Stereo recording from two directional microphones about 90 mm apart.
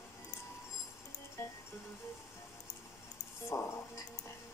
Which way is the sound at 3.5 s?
35° left (ahead or behind).